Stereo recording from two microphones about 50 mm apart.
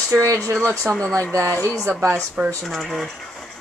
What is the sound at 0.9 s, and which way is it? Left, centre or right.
Speech, right.